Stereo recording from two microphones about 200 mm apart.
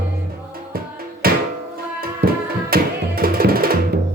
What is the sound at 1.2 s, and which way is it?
Music, 50° right (ahead or behind).